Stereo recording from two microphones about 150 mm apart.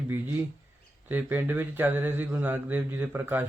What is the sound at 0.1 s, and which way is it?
Speech, 15° right (ahead or behind).